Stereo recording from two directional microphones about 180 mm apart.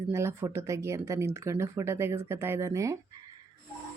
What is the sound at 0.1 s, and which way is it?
Speech, 15° right (ahead or behind).